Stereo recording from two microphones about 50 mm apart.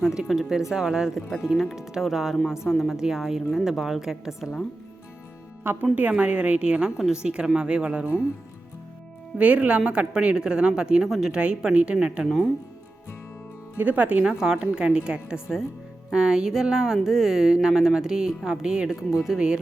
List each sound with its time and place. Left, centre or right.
0.0 s speech: centre
5.8 s a woman's voice: right
9.4 s a woman's voice: right
12.2 s speech: centre
13.7 s speech: right
14.3 s a woman's voice: centre